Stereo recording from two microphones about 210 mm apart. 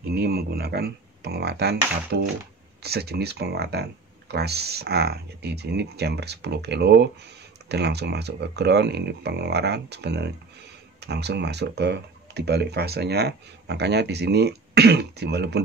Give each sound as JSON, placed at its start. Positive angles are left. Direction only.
{"t": 0.1, "sound": "speech", "side_deg": -50}